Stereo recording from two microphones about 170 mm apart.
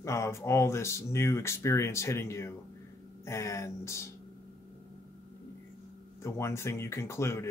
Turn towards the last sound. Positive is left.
turn(degrees=15)  # may be behind; listen again after turning